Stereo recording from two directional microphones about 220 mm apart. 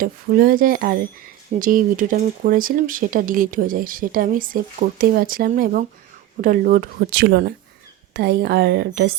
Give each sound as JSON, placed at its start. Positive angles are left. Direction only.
{"t": 0.0, "sound": "a woman's voice", "side_deg": -40}